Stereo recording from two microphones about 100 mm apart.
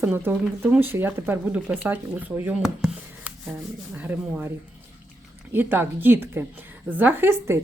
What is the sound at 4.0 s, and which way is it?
Speech, 15° right (ahead or behind).